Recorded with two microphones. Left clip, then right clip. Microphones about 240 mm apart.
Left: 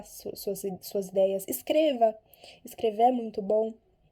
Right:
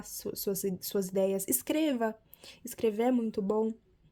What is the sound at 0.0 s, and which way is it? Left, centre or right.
Speech, right.